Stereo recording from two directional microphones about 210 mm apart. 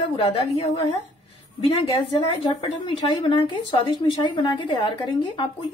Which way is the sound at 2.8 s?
20° left (ahead or behind).